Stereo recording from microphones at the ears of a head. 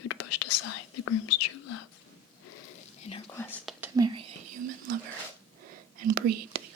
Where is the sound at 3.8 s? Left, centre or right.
Right.